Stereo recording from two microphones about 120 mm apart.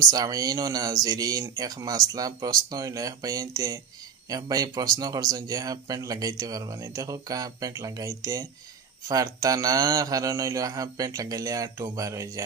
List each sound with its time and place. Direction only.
0.0 s speech: 30° right (ahead or behind)